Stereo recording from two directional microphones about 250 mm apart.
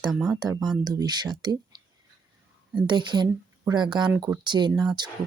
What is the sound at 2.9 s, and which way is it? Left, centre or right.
Speech, centre.